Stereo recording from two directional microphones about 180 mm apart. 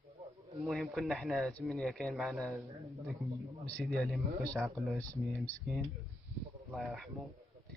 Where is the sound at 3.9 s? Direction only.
Centre (ahead or behind).